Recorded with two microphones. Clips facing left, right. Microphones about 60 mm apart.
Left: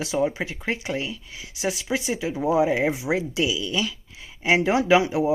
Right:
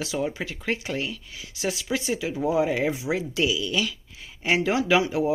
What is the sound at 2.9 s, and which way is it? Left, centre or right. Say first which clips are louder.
Speech: left 2 dB; left.